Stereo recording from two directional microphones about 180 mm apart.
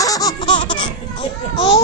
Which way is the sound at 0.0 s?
20° left (ahead or behind).